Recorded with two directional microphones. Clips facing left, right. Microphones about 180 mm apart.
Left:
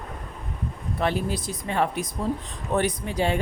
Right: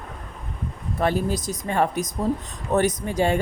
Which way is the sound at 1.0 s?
45° right (ahead or behind).